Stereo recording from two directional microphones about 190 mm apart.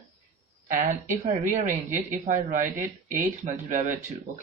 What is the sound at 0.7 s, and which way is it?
Speech, 45° right (ahead or behind).